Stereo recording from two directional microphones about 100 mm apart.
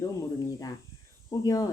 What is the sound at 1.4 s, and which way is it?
Speech, 40° left (ahead or behind).